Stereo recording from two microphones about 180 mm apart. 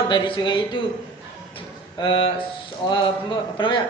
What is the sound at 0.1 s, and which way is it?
Speech, 25° left (ahead or behind).